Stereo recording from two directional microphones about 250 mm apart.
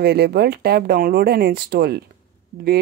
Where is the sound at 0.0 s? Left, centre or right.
Right.